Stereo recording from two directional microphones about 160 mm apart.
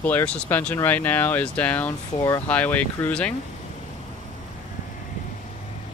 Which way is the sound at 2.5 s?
10° left (ahead or behind).